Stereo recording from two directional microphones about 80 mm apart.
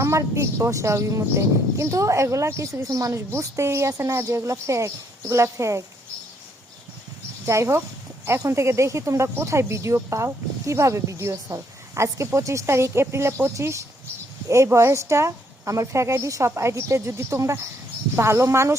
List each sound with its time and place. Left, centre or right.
0.0 s speech: right
7.4 s speech: right